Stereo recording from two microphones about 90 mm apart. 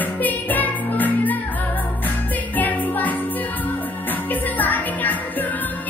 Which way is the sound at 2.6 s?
20° left (ahead or behind).